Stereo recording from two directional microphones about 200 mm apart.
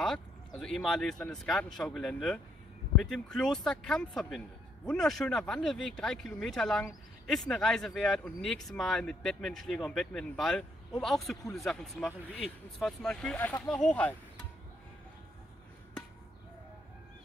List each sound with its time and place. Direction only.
0.0 s speech: centre (ahead or behind)